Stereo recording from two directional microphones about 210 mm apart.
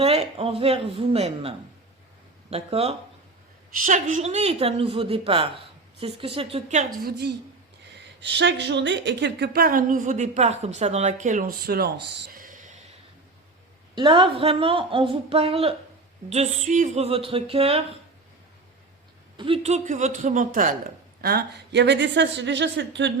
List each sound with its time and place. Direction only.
0.0 s a woman's voice: 30° right (ahead or behind)
8.2 s speech: 55° right (ahead or behind)
12.3 s a sound: 40° right (ahead or behind)
13.9 s a woman's voice: 25° right (ahead or behind)
19.4 s speech: 30° right (ahead or behind); by 23.1 s 60° right (ahead or behind)